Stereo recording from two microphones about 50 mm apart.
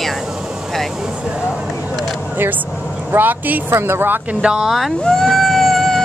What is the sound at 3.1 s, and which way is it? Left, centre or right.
Speech, right.